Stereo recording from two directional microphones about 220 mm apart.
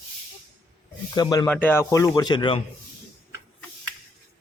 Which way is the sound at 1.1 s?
20° left (ahead or behind).